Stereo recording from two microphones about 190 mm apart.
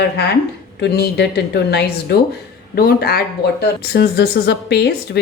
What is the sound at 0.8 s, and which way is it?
Speech, 60° left (ahead or behind).